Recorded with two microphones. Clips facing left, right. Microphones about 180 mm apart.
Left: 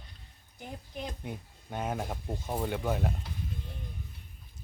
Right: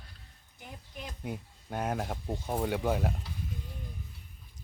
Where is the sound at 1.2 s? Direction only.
5° right (ahead or behind).